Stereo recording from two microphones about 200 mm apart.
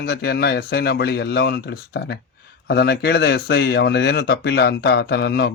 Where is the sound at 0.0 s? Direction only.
55° left (ahead or behind).